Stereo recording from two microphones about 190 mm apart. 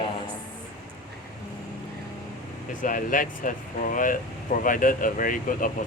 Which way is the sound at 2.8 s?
45° left (ahead or behind).